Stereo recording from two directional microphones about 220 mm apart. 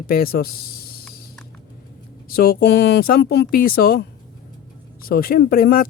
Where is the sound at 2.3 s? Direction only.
40° left (ahead or behind).